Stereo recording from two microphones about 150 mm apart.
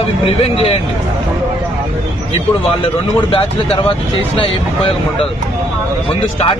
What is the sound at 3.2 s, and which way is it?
Speech, 35° left (ahead or behind).